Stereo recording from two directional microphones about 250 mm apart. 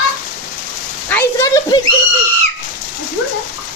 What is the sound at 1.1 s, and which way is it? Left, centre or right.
Speech, centre.